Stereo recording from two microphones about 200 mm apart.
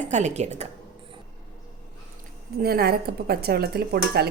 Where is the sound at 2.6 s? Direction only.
50° right (ahead or behind).